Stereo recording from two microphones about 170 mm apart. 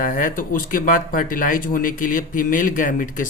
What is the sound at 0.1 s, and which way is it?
Speech, 50° left (ahead or behind).